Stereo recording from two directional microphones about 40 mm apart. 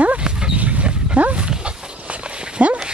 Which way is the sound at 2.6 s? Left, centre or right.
Right.